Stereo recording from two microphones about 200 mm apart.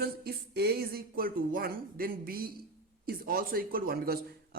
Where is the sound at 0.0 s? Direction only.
50° right (ahead or behind).